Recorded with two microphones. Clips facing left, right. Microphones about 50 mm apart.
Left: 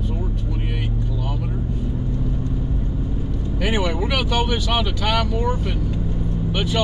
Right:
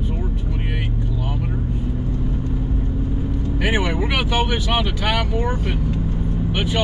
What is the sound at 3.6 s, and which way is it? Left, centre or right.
Speech, centre.